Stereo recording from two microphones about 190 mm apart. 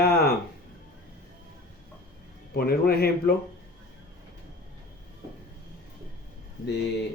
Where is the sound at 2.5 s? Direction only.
55° left (ahead or behind).